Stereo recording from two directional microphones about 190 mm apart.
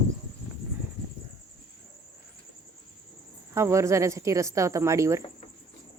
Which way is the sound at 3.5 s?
15° right (ahead or behind).